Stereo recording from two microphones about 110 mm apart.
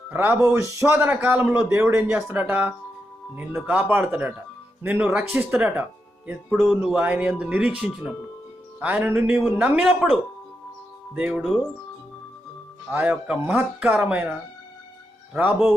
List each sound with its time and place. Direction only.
0.1 s a man's voice: 20° right (ahead or behind)
3.8 s a man's voice: 20° right (ahead or behind)
6.5 s speech: centre (ahead or behind)
6.8 s a man's voice: 10° right (ahead or behind)
12.9 s a man's voice: 15° right (ahead or behind)